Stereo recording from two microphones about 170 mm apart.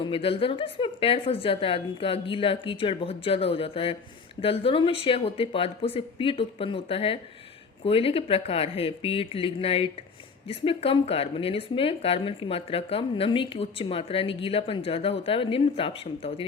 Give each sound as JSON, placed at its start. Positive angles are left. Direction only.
{"t": 0.0, "sound": "speech", "side_deg": 35}